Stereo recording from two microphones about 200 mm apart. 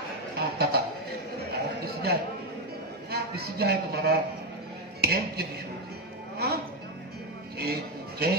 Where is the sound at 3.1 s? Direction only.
50° right (ahead or behind).